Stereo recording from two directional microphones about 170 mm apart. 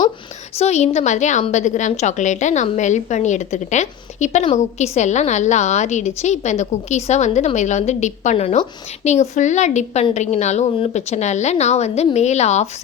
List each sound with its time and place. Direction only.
0.6 s a woman's voice: 40° left (ahead or behind)